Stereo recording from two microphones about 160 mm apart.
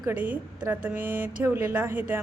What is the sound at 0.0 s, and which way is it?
A woman's voice, 10° right (ahead or behind).